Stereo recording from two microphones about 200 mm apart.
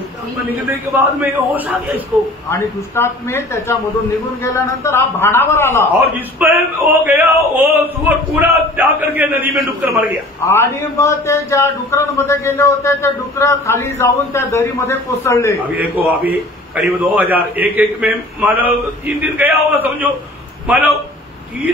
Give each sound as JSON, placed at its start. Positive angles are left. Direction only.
{"t": 1.2, "sound": "a man's voice", "side_deg": -10}
{"t": 2.5, "sound": "a man's voice", "side_deg": 10}
{"t": 6.1, "sound": "a man's voice", "side_deg": -10}
{"t": 10.4, "sound": "a man's voice", "side_deg": 10}
{"t": 15.7, "sound": "a man's voice", "side_deg": -10}